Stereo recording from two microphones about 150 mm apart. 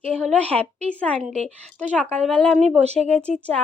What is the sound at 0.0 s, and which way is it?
Speech, 45° right (ahead or behind).